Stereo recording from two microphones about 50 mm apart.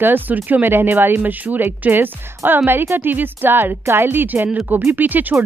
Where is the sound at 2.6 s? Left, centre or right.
Right.